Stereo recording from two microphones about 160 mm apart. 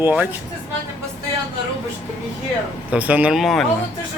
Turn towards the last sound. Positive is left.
turn(degrees=0)  # may be behind; listen again after turning